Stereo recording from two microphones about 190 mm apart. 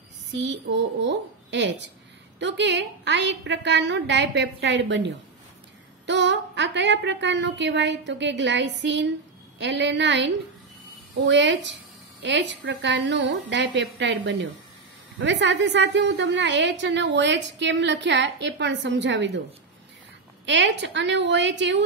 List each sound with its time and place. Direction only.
0.4 s a woman's voice: 70° right (ahead or behind)
20.4 s a woman's voice: 70° right (ahead or behind)